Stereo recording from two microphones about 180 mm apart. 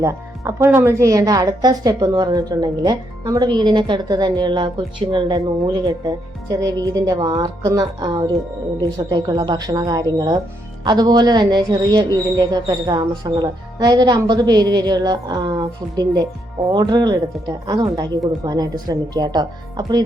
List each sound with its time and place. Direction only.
0.0 s speech: 15° right (ahead or behind)